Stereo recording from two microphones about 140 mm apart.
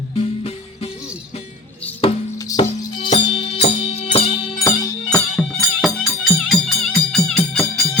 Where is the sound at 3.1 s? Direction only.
45° left (ahead or behind).